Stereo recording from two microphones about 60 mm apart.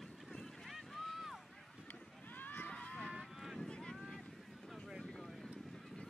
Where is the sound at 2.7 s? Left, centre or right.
Left.